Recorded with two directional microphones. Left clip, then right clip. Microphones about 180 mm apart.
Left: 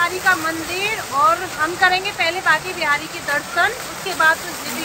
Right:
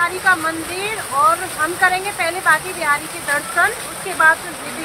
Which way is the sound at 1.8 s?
5° left (ahead or behind).